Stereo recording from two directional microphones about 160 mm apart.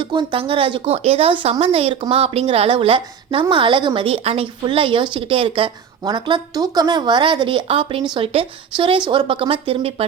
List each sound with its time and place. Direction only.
0.0 s a woman's voice: 30° right (ahead or behind)